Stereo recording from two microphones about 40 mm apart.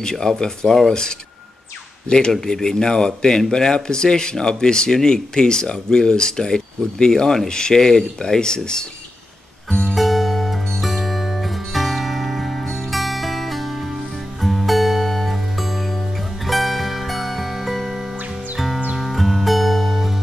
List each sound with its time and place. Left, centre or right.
0.0 s speech: centre
0.7 s speech: centre
2.0 s speech: centre
9.9 s music: centre